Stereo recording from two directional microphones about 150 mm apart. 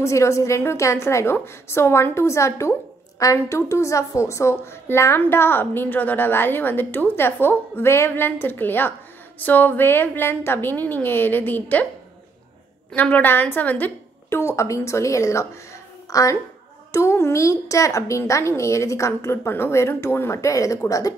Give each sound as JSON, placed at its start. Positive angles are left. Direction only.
{"t": 0.0, "sound": "a woman's voice", "side_deg": 20}
{"t": 12.9, "sound": "a woman's voice", "side_deg": 10}